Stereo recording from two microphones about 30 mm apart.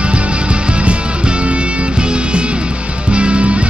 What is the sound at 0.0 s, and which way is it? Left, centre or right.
Music, right.